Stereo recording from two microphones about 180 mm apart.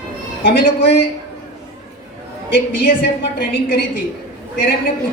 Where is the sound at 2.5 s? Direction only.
65° left (ahead or behind).